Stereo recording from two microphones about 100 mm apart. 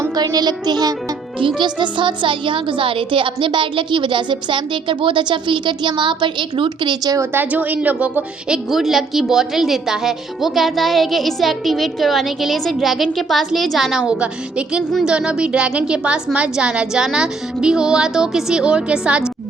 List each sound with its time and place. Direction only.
0.2 s music: 45° right (ahead or behind)
1.4 s speech: 55° right (ahead or behind); by 7.3 s 40° right (ahead or behind)
7.3 s a woman's voice: 15° right (ahead or behind)